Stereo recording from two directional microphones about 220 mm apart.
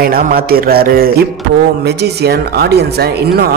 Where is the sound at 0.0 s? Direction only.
45° right (ahead or behind).